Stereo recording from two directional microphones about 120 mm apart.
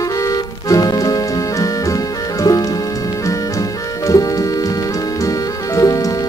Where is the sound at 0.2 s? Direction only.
30° left (ahead or behind).